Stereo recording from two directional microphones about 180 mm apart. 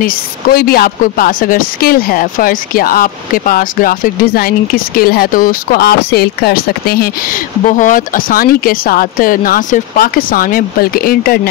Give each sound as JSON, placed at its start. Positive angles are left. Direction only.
{"t": 0.0, "sound": "a woman's voice", "side_deg": 55}
{"t": 7.6, "sound": "a woman's voice", "side_deg": 45}